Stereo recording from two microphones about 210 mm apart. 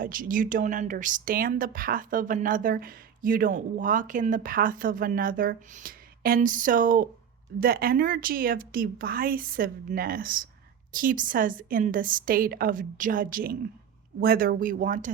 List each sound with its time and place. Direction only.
0.0 s a woman's voice: 40° right (ahead or behind)